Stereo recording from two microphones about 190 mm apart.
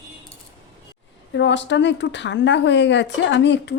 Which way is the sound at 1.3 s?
70° left (ahead or behind).